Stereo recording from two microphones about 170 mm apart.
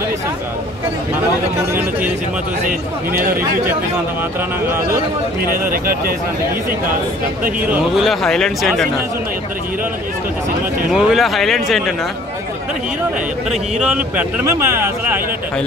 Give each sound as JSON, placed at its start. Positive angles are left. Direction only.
{"t": 1.7, "sound": "speech", "side_deg": -10}
{"t": 2.6, "sound": "a man's voice", "side_deg": -55}
{"t": 5.4, "sound": "a man's voice", "side_deg": -55}
{"t": 7.6, "sound": "speech", "side_deg": -10}
{"t": 8.1, "sound": "speech", "side_deg": 5}
{"t": 10.9, "sound": "speech", "side_deg": 0}
{"t": 13.5, "sound": "speech", "side_deg": -5}
{"t": 14.1, "sound": "speech", "side_deg": -15}